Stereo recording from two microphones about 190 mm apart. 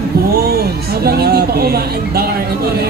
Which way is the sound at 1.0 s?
55° right (ahead or behind).